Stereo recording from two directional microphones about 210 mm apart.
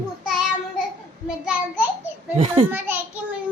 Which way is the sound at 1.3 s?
5° right (ahead or behind).